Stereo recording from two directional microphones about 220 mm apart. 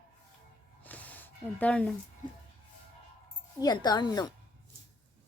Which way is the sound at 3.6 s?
20° left (ahead or behind).